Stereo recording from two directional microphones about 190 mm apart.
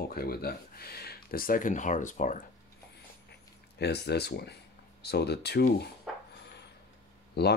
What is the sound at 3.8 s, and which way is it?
Speech, 60° left (ahead or behind).